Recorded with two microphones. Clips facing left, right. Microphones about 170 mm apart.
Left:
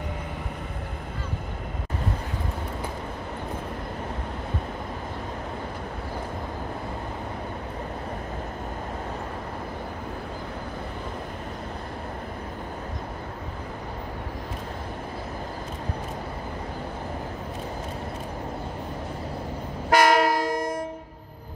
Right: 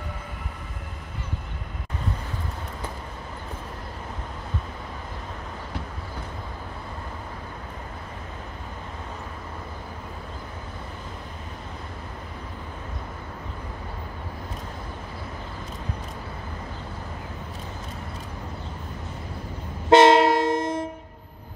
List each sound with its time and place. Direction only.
19.9 s train: 25° right (ahead or behind)